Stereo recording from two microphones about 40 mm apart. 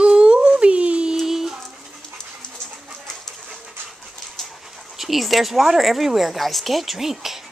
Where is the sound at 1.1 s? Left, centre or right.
Centre.